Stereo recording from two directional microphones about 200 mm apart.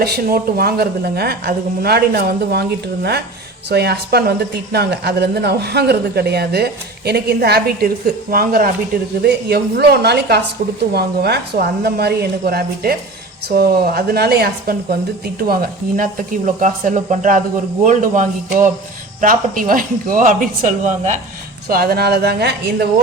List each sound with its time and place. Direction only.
0.0 s a woman's voice: 50° right (ahead or behind)
21.7 s a woman's voice: 50° right (ahead or behind)